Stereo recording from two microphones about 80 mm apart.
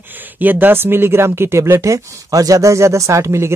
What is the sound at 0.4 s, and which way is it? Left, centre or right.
Speech, right.